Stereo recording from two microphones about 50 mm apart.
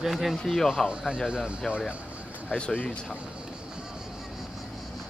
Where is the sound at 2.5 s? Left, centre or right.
Left.